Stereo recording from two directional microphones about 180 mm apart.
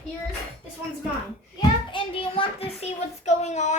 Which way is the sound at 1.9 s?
30° left (ahead or behind).